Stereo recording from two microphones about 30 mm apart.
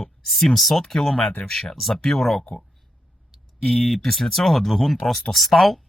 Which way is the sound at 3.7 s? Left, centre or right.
Centre.